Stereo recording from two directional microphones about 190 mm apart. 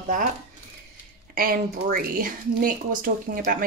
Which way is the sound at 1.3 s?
50° right (ahead or behind).